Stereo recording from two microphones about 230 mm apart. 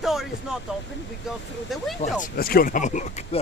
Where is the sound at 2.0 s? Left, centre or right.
Left.